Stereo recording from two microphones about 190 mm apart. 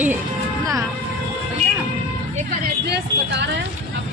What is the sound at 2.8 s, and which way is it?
Vehicle, 60° right (ahead or behind).